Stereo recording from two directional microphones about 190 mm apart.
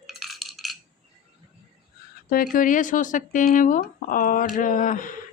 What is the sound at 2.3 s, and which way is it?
Speech, 45° left (ahead or behind).